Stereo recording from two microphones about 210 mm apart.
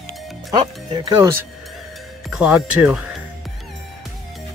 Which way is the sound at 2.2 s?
5° right (ahead or behind).